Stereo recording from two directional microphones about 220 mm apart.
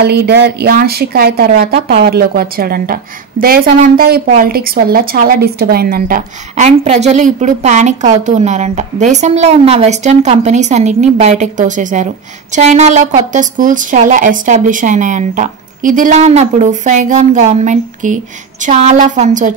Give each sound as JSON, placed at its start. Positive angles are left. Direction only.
{"t": 0.0, "sound": "speech", "side_deg": -45}